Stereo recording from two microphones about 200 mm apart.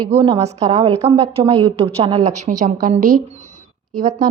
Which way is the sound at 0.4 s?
30° right (ahead or behind).